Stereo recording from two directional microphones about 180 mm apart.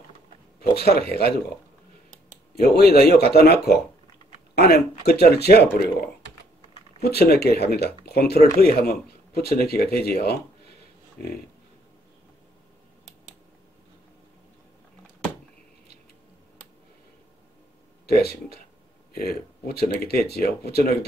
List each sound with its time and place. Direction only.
0.7 s speech: 60° left (ahead or behind)
2.5 s speech: 60° left (ahead or behind)
18.0 s speech: 60° left (ahead or behind)